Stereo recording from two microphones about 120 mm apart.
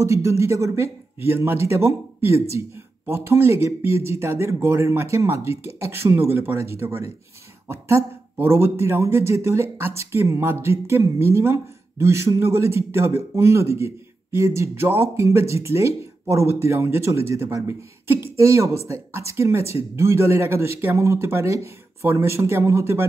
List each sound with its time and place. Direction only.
0.0 s speech: 25° right (ahead or behind)